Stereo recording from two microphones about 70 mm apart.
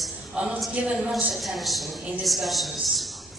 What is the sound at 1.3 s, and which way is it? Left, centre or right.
A woman's voice, centre.